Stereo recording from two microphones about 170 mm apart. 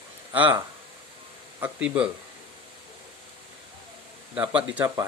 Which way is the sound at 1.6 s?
5° right (ahead or behind).